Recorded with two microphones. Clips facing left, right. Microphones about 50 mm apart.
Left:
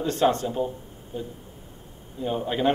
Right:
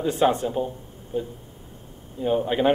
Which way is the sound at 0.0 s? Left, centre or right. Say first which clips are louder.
Right 1 dB; centre.